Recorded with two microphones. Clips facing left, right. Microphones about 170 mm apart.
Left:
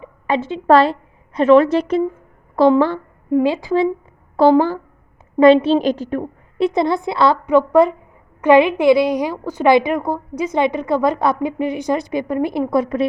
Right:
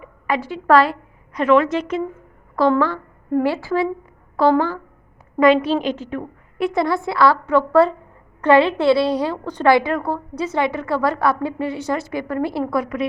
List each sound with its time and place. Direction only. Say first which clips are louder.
0.0 s a woman's voice: left 3 dB; 25° left (ahead or behind)
3.3 s a woman's voice: left 3 dB; 15° left (ahead or behind); by 6.2 s 40° left (ahead or behind)
6.6 s a woman's voice: left 3 dB; 20° left (ahead or behind)